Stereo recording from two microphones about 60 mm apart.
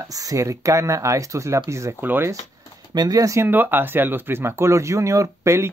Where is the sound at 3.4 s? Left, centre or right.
Right.